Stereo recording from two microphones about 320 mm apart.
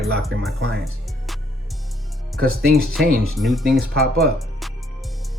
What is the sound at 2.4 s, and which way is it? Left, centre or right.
Speech, right.